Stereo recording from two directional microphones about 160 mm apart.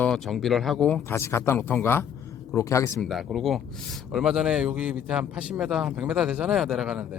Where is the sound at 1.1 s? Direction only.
15° left (ahead or behind).